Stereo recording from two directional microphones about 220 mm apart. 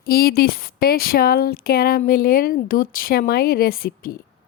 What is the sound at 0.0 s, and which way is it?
A woman's voice, 45° left (ahead or behind).